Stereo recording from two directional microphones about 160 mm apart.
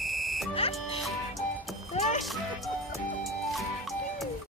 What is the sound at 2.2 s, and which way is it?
Music, centre (ahead or behind).